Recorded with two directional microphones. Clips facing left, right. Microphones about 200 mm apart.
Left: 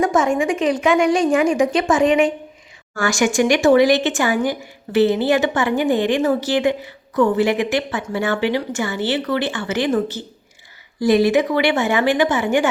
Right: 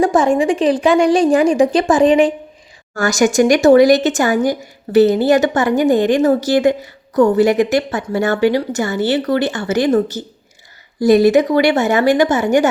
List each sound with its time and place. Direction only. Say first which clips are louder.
0.0 s speech: right 4 dB; 35° right (ahead or behind)